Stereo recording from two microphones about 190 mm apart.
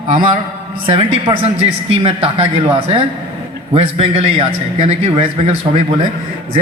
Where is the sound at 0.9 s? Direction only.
30° right (ahead or behind).